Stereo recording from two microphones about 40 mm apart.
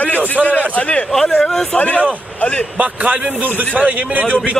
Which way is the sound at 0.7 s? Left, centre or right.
Left.